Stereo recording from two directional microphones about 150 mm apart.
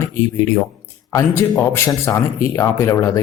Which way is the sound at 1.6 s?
15° left (ahead or behind).